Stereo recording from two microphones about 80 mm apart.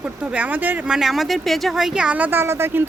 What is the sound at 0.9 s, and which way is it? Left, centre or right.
Speech, centre.